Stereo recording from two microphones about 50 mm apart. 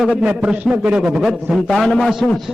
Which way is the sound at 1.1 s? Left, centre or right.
Centre.